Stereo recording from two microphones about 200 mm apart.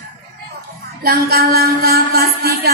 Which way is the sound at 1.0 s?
50° right (ahead or behind).